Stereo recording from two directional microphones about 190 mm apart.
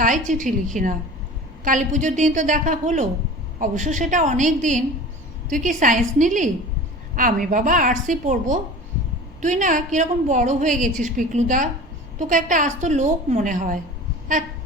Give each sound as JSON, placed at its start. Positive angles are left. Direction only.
{"t": 0.0, "sound": "a woman's voice", "side_deg": -40}